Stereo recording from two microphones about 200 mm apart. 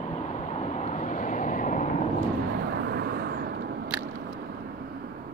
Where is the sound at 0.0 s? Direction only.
35° left (ahead or behind).